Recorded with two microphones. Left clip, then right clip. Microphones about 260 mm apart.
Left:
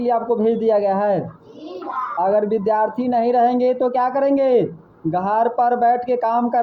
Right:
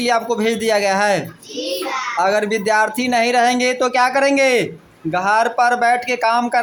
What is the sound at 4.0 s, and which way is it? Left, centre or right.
Speech, right.